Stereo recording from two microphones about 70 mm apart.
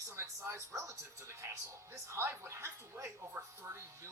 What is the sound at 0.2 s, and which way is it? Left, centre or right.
Speech, right.